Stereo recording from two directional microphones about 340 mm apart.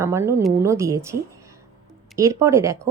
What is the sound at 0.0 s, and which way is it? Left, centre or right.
Speech, centre.